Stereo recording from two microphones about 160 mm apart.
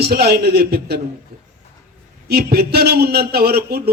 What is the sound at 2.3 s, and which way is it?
A man's voice, 75° right (ahead or behind).